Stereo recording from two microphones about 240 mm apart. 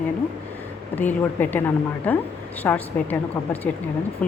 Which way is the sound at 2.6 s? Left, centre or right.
Centre.